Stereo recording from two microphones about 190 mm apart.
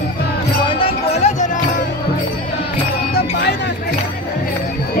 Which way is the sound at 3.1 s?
60° left (ahead or behind).